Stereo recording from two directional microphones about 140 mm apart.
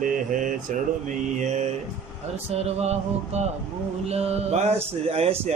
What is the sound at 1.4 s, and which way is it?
Speech, 55° right (ahead or behind).